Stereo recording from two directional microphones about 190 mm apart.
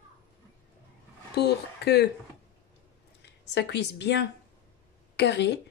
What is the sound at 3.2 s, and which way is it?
Speech, 65° left (ahead or behind).